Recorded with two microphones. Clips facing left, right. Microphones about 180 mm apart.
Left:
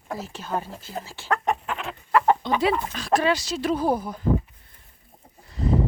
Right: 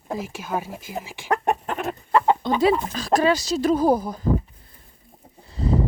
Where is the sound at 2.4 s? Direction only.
45° right (ahead or behind).